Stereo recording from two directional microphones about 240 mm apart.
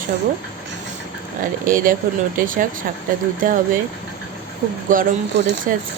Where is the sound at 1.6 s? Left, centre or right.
Right.